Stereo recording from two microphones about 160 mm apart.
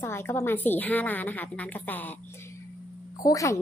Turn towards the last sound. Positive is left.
turn(degrees=20)  # may be behind; listen again after turning